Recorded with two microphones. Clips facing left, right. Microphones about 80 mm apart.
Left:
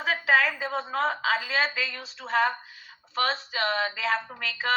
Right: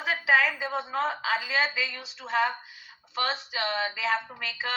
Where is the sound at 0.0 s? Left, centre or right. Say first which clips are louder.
Left 1 dB; left.